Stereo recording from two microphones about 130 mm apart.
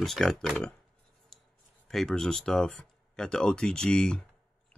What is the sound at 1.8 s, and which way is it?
Speech, 5° left (ahead or behind).